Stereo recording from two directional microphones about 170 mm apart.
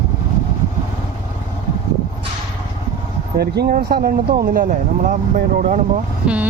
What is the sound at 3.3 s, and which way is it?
Speech, 70° right (ahead or behind).